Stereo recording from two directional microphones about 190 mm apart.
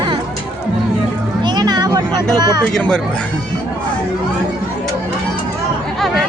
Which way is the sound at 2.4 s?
20° right (ahead or behind).